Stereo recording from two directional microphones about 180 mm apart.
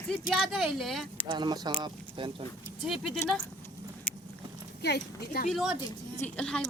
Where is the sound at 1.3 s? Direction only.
25° right (ahead or behind).